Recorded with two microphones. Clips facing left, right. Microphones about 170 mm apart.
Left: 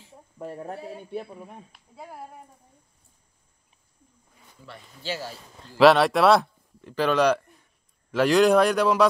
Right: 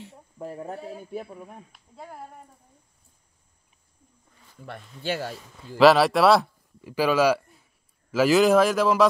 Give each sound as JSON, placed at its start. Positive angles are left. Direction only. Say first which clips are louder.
{"t": 0.4, "sound": "speech", "louder": "even", "side_deg": 0}
{"t": 4.6, "sound": "speech", "louder": "right 4 dB", "side_deg": -55}
{"t": 5.8, "sound": "a man's voice", "louder": "even", "side_deg": 0}